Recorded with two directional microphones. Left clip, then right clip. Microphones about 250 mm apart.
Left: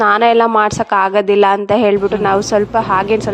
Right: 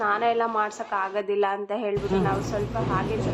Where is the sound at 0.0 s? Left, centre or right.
Left.